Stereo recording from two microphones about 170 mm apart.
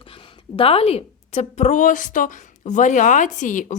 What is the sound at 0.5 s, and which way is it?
Speech, 35° left (ahead or behind).